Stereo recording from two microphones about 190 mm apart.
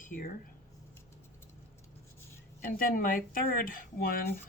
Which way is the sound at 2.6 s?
45° left (ahead or behind).